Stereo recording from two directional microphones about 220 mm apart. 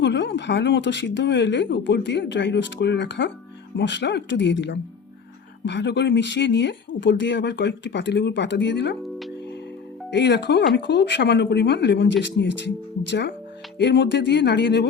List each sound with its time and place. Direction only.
0.0 s speech: 55° left (ahead or behind)
10.1 s speech: 50° left (ahead or behind)